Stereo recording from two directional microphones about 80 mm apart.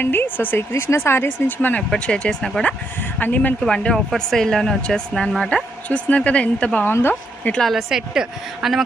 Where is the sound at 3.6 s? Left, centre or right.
Centre.